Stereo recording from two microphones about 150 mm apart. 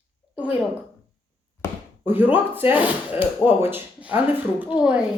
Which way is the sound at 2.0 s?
10° right (ahead or behind).